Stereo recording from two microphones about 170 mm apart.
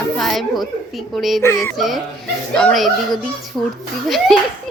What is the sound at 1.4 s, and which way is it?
Music, 15° left (ahead or behind).